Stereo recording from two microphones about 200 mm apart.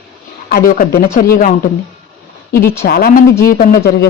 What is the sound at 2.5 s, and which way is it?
A woman's voice, 50° left (ahead or behind).